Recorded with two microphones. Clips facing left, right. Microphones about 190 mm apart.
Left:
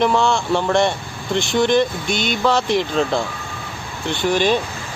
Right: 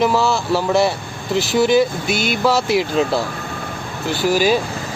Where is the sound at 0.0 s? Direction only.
5° right (ahead or behind).